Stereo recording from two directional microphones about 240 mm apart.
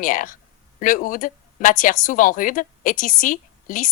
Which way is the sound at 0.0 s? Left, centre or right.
Left.